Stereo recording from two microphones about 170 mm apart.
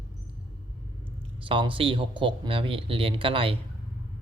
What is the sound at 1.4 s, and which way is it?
Speech, 30° right (ahead or behind).